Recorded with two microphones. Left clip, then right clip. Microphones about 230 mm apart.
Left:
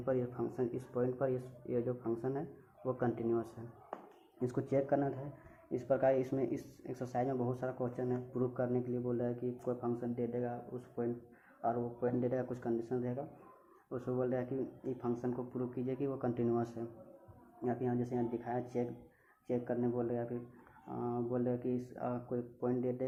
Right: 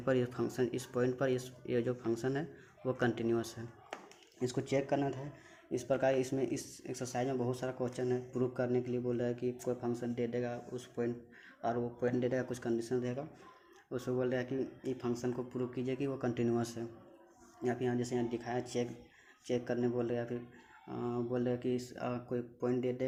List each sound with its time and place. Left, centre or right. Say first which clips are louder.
0.0 s speech: right 3 dB; right
4.4 s speech: even; right